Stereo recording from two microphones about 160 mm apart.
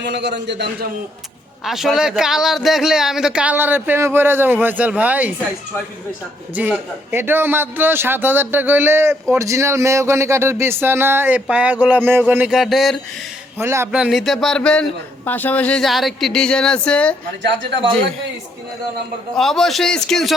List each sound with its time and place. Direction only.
0.0 s a man's voice: 90° right
1.6 s a man's voice: centre (ahead or behind)
6.6 s a man's voice: 10° right (ahead or behind)
13.6 s a man's voice: 15° right (ahead or behind)
13.9 s a man's voice: 5° right (ahead or behind)
19.4 s a man's voice: centre (ahead or behind)